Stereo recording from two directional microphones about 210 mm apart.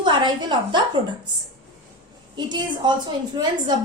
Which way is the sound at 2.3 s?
20° right (ahead or behind).